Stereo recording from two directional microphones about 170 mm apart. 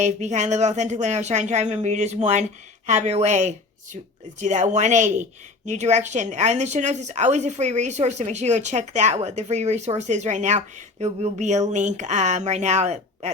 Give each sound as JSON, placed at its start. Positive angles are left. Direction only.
{"t": 0.0, "sound": "speech", "side_deg": -45}